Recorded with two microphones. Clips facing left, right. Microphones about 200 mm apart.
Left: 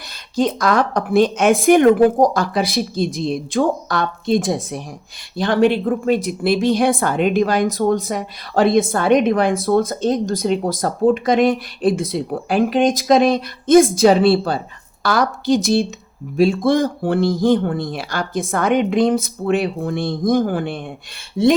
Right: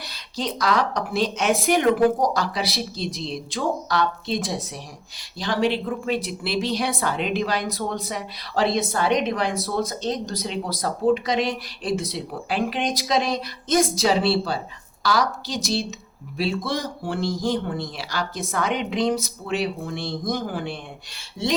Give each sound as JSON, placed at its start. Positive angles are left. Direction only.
{"t": 0.1, "sound": "speech", "side_deg": 50}